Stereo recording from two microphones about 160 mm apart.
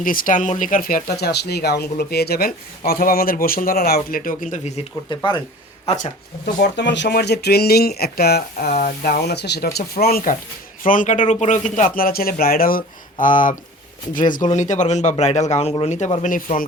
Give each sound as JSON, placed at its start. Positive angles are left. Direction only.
{"t": 0.0, "sound": "speech", "side_deg": 60}
{"t": 5.0, "sound": "speech", "side_deg": 30}
{"t": 6.7, "sound": "speech", "side_deg": 90}
{"t": 10.8, "sound": "speech", "side_deg": 55}